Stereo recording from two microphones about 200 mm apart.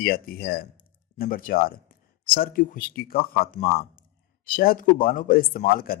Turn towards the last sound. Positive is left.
turn(degrees=45)  # may be behind; listen again after turning